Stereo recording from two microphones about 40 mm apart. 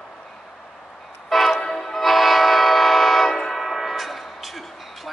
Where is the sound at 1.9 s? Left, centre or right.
Centre.